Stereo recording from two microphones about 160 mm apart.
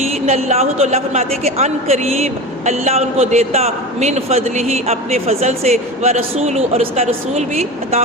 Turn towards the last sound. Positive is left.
turn(degrees=-40)  # may be behind; listen again after turning